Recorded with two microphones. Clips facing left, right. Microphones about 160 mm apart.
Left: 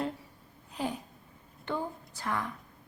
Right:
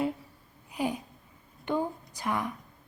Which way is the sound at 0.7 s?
10° right (ahead or behind).